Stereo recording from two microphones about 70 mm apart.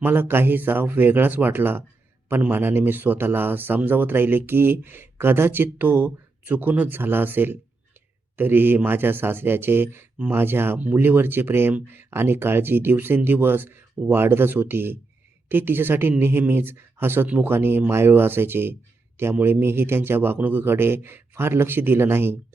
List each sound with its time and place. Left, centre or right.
0.0 s speech: right
17.2 s speech: right
17.5 s speech: right